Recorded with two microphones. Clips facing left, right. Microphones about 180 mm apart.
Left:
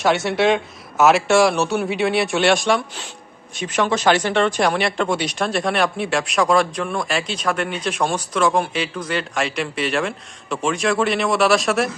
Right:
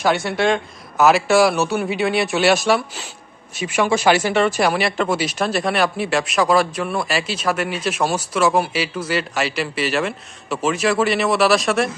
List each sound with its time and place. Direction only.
0.0 s speech: centre (ahead or behind)